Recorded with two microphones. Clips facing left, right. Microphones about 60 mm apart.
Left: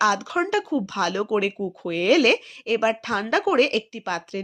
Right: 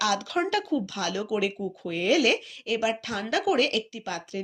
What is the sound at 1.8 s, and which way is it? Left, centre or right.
Speech, left.